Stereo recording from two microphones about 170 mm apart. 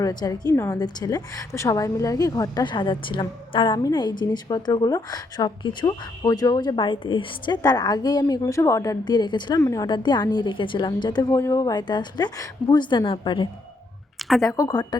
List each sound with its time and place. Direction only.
0.0 s a woman's voice: 20° left (ahead or behind)
14.2 s a sound: centre (ahead or behind)
14.4 s a woman's voice: 20° left (ahead or behind)